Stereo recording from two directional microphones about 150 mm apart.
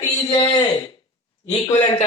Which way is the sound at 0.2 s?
25° left (ahead or behind).